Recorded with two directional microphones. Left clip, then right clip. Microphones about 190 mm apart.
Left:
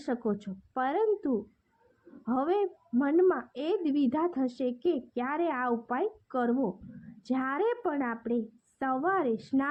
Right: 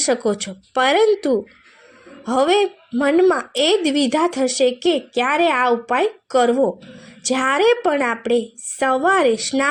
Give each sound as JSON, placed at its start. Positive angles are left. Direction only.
{"t": 0.7, "sound": "a woman's voice", "side_deg": -20}